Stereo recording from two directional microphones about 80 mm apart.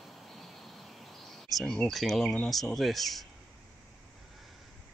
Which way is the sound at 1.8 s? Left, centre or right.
Centre.